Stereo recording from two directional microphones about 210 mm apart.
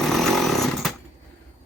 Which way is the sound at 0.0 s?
Centre (ahead or behind).